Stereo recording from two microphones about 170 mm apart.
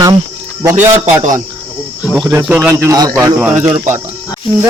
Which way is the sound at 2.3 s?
10° right (ahead or behind).